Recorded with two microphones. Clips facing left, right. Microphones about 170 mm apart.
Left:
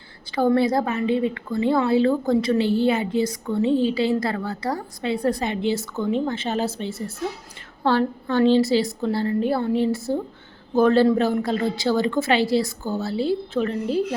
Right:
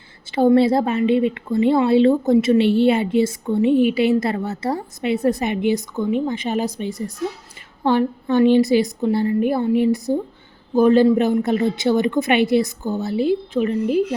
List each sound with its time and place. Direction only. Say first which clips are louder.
0.3 s a woman's voice: right 5 dB; 25° right (ahead or behind)
3.7 s a woman's voice: right 4 dB; 65° right (ahead or behind)
3.9 s a woman's voice: right 4 dB; 20° right (ahead or behind)